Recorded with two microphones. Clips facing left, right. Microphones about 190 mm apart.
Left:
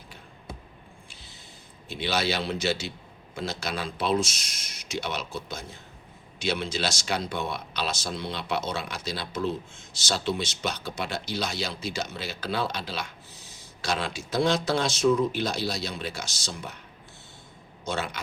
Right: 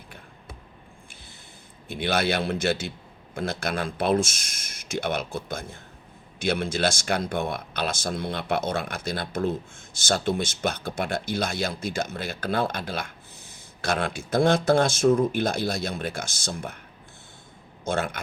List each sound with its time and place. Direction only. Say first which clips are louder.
1.9 s speech: right 3 dB; 55° right (ahead or behind)
17.8 s speech: right 4 dB; 50° right (ahead or behind)